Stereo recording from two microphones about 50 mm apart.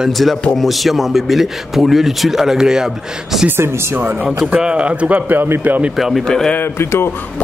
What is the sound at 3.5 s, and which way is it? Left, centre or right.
Speech, right.